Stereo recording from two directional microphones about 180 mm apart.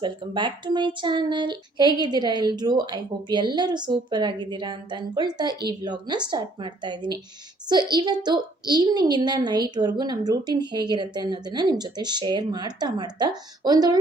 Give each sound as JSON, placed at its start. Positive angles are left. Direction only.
{"t": 0.0, "sound": "a woman's voice", "side_deg": -25}